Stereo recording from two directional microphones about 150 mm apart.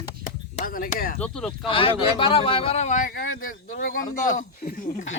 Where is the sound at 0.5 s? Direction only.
65° left (ahead or behind).